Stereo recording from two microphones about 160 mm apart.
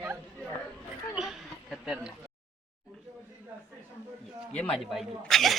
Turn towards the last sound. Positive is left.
turn(degrees=0)  # may be behind; listen again after turning